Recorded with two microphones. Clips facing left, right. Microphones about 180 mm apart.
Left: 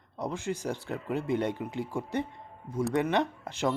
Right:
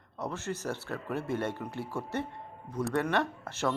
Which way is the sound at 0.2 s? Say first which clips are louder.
Left 3 dB; 15° left (ahead or behind).